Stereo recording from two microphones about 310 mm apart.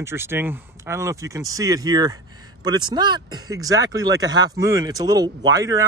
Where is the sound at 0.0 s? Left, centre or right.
Centre.